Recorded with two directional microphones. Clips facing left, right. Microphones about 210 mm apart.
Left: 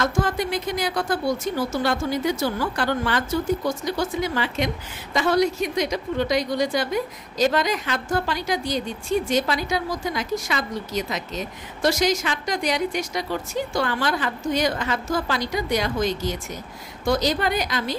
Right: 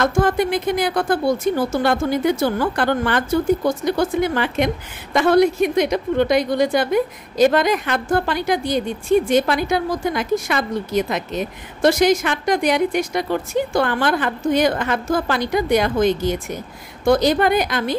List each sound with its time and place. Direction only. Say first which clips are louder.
0.0 s a woman's voice: right 6 dB; 55° right (ahead or behind)